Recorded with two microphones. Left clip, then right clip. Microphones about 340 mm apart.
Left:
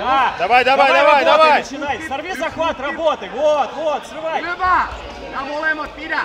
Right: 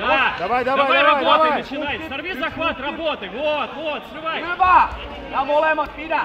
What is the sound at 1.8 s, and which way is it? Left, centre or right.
Speech, centre.